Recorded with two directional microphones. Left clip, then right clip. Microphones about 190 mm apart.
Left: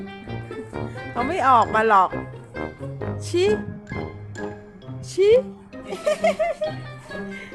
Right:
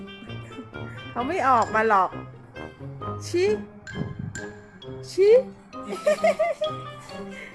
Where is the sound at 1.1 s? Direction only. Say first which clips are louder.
Left 4 dB; 5° left (ahead or behind).